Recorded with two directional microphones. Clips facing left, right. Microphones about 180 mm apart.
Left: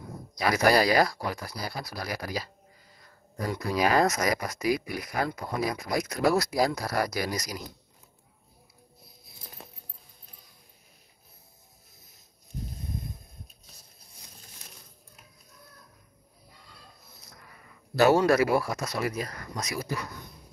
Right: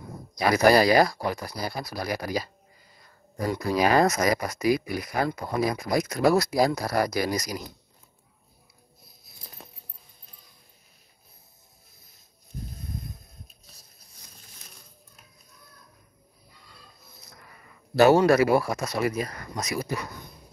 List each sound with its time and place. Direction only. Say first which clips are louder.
0.4 s speech: right 4 dB; 25° right (ahead or behind)
3.4 s speech: right 3 dB; 30° right (ahead or behind)
17.9 s speech: right 3 dB; 25° right (ahead or behind)